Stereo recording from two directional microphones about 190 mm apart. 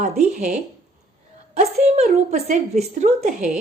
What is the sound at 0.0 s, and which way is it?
A woman's voice, 40° right (ahead or behind).